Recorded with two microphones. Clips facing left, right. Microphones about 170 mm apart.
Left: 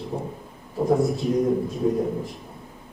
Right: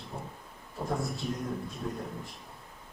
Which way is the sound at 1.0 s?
Centre (ahead or behind).